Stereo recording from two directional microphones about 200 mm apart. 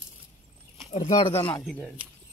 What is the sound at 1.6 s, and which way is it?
Speech, 5° left (ahead or behind).